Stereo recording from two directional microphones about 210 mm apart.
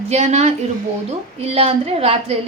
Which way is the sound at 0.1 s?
30° right (ahead or behind).